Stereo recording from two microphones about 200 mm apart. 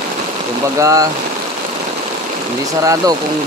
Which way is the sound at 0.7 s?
15° right (ahead or behind).